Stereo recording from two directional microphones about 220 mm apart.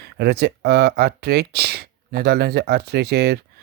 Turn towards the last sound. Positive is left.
turn(degrees=-45)  # may be behind; listen again after turning